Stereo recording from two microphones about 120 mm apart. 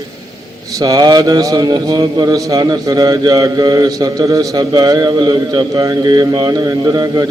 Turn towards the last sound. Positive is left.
turn(degrees=-35)  # may be behind; listen again after turning